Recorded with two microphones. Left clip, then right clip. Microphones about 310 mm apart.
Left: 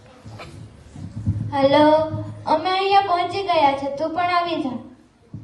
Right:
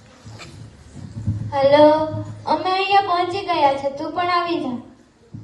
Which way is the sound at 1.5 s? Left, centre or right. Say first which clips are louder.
Right 2 dB; left.